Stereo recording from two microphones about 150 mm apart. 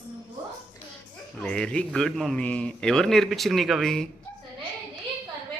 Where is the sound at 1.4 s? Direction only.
5° left (ahead or behind).